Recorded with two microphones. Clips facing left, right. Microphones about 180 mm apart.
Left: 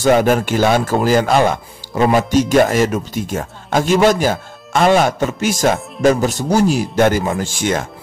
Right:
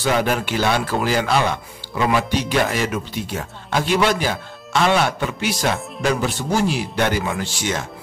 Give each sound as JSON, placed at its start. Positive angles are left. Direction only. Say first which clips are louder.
{"t": 0.0, "sound": "speech", "louder": "left 7 dB", "side_deg": 45}